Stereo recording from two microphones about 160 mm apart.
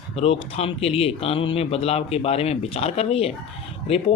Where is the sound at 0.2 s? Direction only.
40° left (ahead or behind).